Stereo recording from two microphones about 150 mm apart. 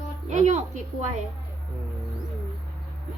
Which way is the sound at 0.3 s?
50° right (ahead or behind).